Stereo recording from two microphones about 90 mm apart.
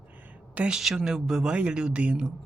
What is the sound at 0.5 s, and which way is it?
Speech, 10° right (ahead or behind).